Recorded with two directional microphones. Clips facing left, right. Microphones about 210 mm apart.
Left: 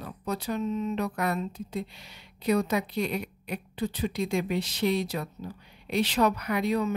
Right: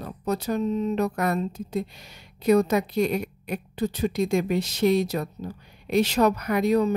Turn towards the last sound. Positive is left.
turn(degrees=-45)  # may be behind; listen again after turning